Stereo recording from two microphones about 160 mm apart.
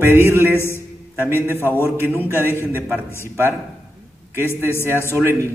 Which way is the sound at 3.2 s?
15° right (ahead or behind).